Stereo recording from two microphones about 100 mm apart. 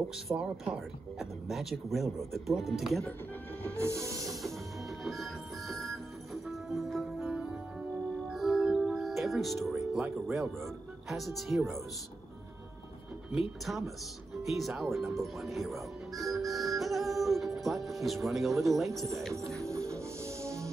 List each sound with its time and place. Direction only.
0.4 s speech: 5° right (ahead or behind)
3.7 s train: 25° right (ahead or behind)
4.8 s music: centre (ahead or behind)
10.2 s speech: centre (ahead or behind)
13.3 s speech: centre (ahead or behind)
14.5 s music: centre (ahead or behind)
19.7 s music: 30° right (ahead or behind)